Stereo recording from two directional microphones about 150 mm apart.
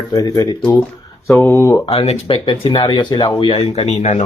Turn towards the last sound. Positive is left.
turn(degrees=50)  # may be behind; listen again after turning